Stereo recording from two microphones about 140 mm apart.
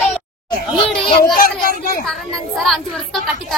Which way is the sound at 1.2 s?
90° left.